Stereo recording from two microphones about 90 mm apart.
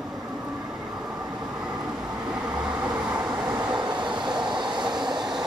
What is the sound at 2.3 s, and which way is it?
Vehicle, 10° right (ahead or behind).